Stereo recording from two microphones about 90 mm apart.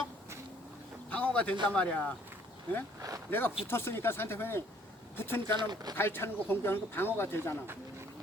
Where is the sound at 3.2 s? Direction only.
20° left (ahead or behind).